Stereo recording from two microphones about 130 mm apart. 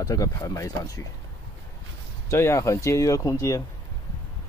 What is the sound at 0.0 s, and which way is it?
Speech, 30° left (ahead or behind).